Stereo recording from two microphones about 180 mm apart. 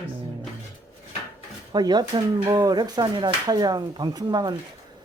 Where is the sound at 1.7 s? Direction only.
25° right (ahead or behind).